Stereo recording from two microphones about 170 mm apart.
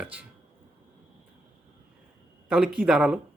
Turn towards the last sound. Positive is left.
turn(degrees=-5)  # may be behind; listen again after turning